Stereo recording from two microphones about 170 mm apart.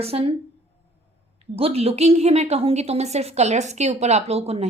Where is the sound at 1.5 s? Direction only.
35° right (ahead or behind).